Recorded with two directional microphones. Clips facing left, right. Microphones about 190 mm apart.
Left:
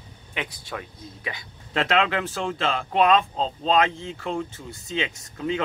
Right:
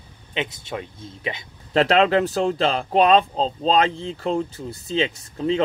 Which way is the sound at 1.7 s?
35° right (ahead or behind).